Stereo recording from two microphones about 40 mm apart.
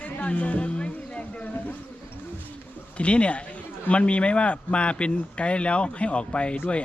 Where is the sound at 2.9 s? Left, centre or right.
Left.